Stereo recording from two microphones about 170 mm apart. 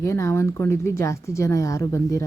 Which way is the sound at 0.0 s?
15° left (ahead or behind).